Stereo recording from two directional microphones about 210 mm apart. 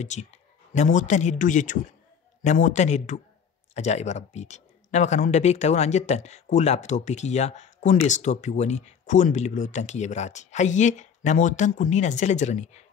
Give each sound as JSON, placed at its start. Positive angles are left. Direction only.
{"t": 0.0, "sound": "a man's voice", "side_deg": 35}